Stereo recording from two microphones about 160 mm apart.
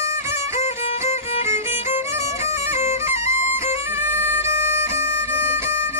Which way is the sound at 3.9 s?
15° right (ahead or behind).